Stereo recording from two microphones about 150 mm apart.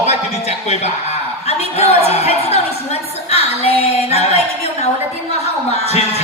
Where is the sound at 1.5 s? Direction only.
45° left (ahead or behind).